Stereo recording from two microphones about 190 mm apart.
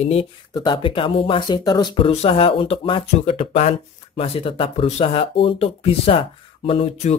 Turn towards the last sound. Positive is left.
turn(degrees=35)  # may be behind; listen again after turning